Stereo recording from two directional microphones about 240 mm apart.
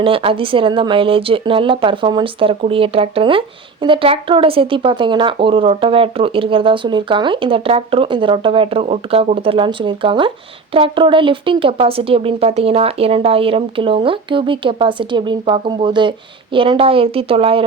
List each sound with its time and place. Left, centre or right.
0.0 s speech: right